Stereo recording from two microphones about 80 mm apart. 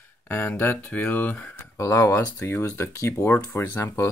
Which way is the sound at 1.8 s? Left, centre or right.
Left.